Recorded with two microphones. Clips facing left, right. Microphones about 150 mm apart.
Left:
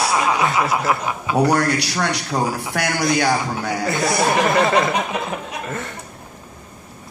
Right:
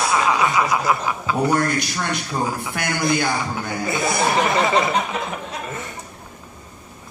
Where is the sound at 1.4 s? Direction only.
70° left (ahead or behind).